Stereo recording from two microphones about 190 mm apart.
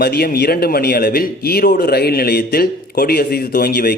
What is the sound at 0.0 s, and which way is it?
A man's voice, 55° left (ahead or behind).